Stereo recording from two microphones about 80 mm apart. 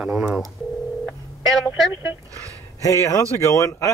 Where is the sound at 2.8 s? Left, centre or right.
Left.